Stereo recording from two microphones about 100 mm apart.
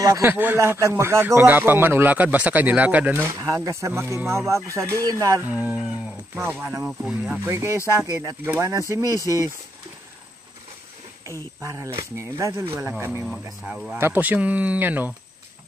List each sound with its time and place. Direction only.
0.0 s a man's voice: 30° right (ahead or behind)
0.3 s a man's voice: 20° right (ahead or behind)
0.6 s a man's voice: 30° right (ahead or behind)
5.5 s a man's voice: 15° right (ahead or behind)
7.4 s a man's voice: 25° right (ahead or behind)
11.6 s a man's voice: 30° right (ahead or behind)
13.2 s speech: 5° right (ahead or behind)
13.9 s speech: 20° right (ahead or behind)